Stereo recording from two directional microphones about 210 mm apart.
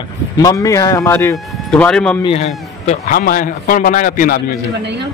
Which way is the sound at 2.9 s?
40° left (ahead or behind).